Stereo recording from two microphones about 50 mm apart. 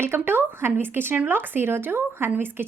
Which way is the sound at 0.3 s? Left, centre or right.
Right.